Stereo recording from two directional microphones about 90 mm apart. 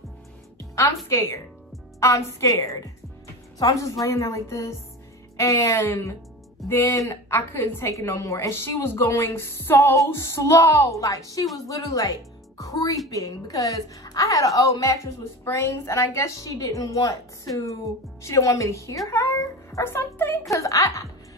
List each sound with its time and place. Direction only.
0.6 s music: 30° left (ahead or behind)
1.0 s a woman's voice: 35° left (ahead or behind)
18.2 s a woman's voice: 35° left (ahead or behind)
20.4 s a woman's voice: 35° left (ahead or behind)